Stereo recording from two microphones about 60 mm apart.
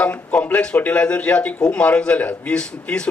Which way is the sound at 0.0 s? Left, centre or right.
Left.